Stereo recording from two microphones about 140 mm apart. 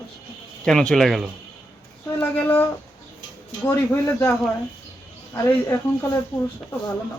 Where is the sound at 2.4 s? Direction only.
15° left (ahead or behind).